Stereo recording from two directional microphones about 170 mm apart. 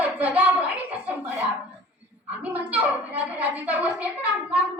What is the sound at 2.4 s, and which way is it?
A woman's voice, 10° right (ahead or behind).